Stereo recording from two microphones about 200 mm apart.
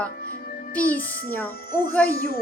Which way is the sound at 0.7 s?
5° left (ahead or behind).